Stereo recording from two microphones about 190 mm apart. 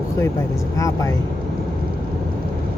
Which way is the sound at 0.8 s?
15° left (ahead or behind).